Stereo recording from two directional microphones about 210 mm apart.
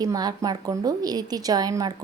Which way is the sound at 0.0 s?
20° right (ahead or behind).